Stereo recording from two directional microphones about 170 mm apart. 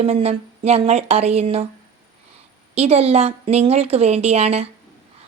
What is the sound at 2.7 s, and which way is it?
A woman's voice, 40° right (ahead or behind).